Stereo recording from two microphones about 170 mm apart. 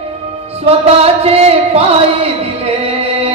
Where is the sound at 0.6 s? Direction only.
35° right (ahead or behind).